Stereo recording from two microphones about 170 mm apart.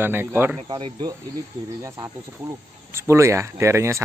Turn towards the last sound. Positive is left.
turn(degrees=-15)  # may be behind; listen again after turning